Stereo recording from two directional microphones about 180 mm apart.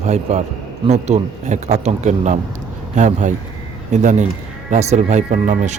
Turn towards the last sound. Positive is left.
turn(degrees=-40)  # may be behind; listen again after turning